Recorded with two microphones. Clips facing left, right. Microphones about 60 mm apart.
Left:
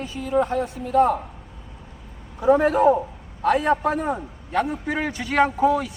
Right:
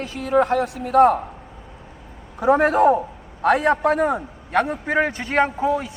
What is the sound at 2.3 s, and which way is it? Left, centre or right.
A man's voice, right.